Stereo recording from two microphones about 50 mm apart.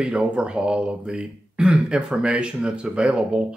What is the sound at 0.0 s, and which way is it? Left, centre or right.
Speech, centre.